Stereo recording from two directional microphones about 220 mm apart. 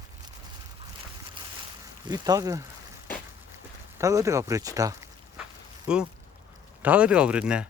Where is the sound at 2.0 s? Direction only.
15° right (ahead or behind).